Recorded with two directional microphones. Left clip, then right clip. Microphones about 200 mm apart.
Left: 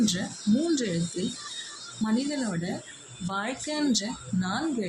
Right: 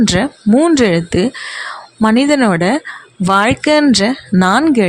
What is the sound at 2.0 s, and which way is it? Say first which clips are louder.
Speech: right 19 dB; 55° right (ahead or behind).